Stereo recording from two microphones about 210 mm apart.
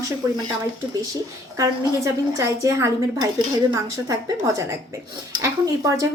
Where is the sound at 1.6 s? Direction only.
20° right (ahead or behind).